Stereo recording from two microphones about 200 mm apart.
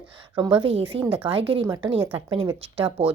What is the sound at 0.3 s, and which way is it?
A woman's voice, 25° right (ahead or behind).